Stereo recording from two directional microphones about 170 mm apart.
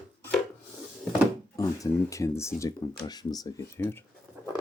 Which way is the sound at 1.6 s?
20° left (ahead or behind).